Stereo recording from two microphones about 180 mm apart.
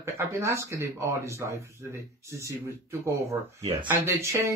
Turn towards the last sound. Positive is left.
turn(degrees=-15)  # may be behind; listen again after turning